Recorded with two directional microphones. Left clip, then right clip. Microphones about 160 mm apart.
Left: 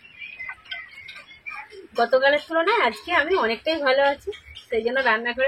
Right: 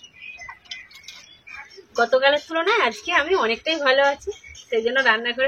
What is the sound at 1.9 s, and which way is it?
Speech, centre (ahead or behind).